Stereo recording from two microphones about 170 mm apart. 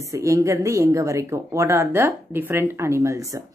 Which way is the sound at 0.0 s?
20° right (ahead or behind).